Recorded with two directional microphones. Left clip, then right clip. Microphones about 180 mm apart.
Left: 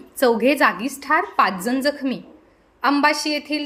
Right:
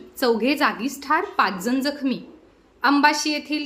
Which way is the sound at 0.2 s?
15° left (ahead or behind).